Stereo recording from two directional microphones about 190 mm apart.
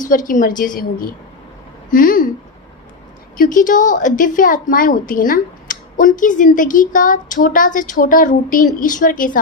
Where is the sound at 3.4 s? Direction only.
45° left (ahead or behind).